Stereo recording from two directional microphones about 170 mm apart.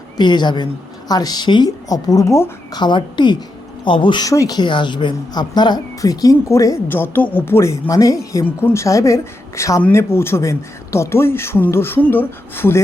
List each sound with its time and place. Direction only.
0.2 s speech: 25° left (ahead or behind)
2.8 s speech: 25° left (ahead or behind)